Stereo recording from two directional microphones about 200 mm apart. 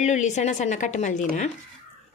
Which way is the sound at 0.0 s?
35° left (ahead or behind).